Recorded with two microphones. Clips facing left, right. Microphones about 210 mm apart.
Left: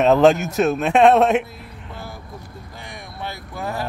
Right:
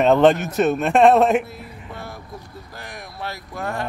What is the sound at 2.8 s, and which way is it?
Speech, centre (ahead or behind).